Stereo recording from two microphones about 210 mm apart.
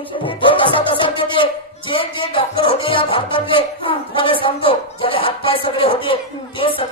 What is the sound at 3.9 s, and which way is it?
Speech, 25° left (ahead or behind).